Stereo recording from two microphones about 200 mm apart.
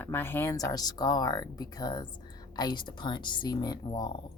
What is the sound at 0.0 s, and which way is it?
Speech, 10° left (ahead or behind).